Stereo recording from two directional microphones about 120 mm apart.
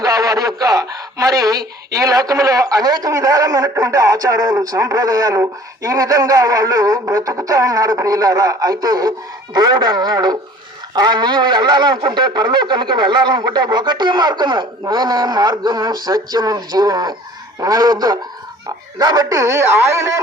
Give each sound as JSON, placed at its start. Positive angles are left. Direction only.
{"t": 0.0, "sound": "speech", "side_deg": -30}
{"t": 10.9, "sound": "a sound", "side_deg": -35}
{"t": 18.9, "sound": "speech", "side_deg": -30}